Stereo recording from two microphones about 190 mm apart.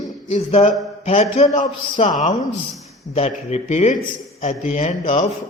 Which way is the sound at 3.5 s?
35° left (ahead or behind).